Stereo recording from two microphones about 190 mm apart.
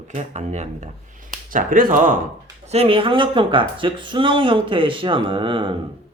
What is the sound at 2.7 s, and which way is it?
Speech, 30° right (ahead or behind).